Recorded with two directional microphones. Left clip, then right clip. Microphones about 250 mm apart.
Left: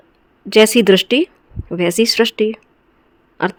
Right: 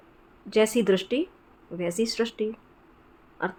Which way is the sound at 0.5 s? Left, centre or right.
Left.